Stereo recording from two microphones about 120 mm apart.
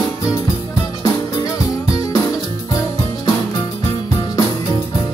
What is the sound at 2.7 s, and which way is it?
Music, 30° left (ahead or behind).